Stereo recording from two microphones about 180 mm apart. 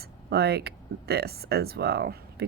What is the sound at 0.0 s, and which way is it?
Speech, 65° right (ahead or behind).